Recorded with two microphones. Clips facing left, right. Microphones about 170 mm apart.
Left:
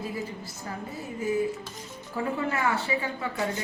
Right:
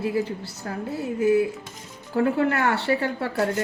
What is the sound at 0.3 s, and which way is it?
Speech, 75° right (ahead or behind).